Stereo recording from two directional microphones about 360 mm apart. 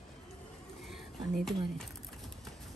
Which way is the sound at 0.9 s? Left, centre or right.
Centre.